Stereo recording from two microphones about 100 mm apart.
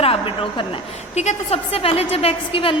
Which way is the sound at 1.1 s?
85° left.